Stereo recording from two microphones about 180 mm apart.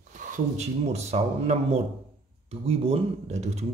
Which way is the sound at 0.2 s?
45° right (ahead or behind).